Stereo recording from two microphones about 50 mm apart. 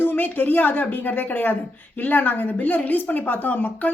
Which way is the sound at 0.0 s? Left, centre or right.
Left.